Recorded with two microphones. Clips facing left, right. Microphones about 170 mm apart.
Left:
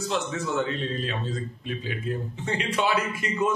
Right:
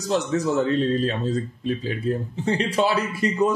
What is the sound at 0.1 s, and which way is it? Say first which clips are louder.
Speech: right 8 dB; 35° right (ahead or behind).